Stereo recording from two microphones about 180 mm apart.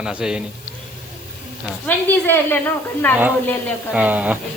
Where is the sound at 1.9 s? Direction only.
10° left (ahead or behind).